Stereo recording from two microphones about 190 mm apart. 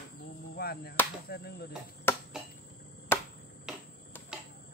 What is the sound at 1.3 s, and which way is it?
Speech, 55° left (ahead or behind).